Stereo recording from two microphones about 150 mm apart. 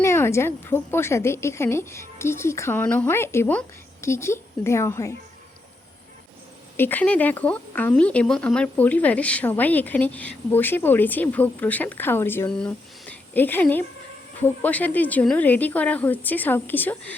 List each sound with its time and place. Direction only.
0.0 s speech: 15° left (ahead or behind)
6.7 s speech: 15° left (ahead or behind)